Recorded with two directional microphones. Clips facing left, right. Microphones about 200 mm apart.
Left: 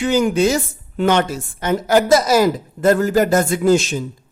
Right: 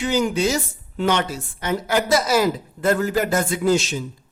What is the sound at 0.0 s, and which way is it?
A man's voice, 50° left (ahead or behind).